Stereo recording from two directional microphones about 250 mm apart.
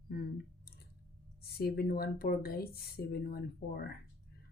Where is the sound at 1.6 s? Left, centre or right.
Left.